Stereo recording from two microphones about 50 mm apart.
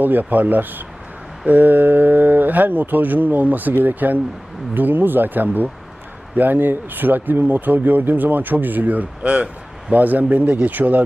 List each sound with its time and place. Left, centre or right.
0.0 s speech: right